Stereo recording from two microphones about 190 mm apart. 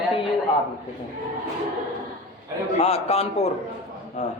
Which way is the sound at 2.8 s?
35° left (ahead or behind).